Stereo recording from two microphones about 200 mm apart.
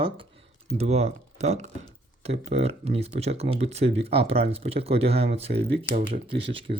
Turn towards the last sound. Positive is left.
turn(degrees=-30)  # may be behind; listen again after turning